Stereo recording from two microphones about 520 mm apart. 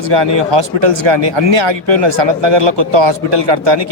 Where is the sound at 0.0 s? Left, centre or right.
Right.